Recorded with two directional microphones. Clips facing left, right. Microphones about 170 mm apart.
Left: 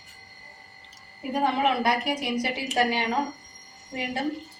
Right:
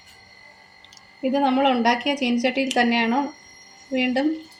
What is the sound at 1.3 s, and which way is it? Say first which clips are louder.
A woman's voice: right 5 dB; 80° right.